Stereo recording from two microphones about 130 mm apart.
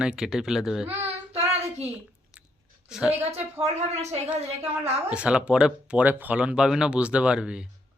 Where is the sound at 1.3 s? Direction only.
55° right (ahead or behind).